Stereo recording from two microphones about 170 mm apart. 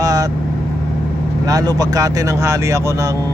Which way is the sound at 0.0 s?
20° right (ahead or behind).